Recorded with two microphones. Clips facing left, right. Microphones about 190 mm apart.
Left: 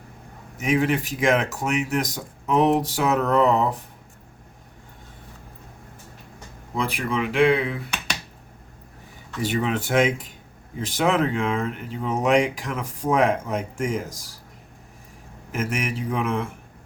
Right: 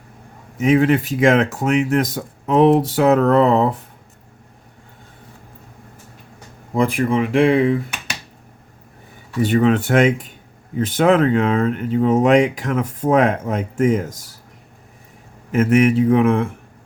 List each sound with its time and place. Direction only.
0.6 s speech: 55° right (ahead or behind)
6.7 s speech: 50° right (ahead or behind)
9.4 s speech: 60° right (ahead or behind)
15.5 s speech: 60° right (ahead or behind)